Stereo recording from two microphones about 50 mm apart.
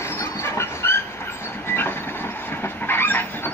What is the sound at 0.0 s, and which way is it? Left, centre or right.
Train, left.